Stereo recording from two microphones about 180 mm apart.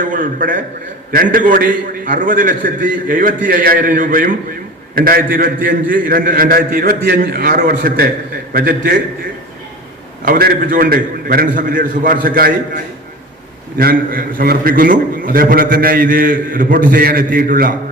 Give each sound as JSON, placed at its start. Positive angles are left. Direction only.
{"t": 0.0, "sound": "a man's voice", "side_deg": -50}
{"t": 10.2, "sound": "a man's voice", "side_deg": -55}